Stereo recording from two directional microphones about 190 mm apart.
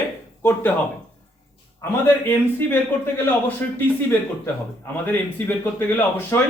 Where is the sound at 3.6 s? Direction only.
10° left (ahead or behind).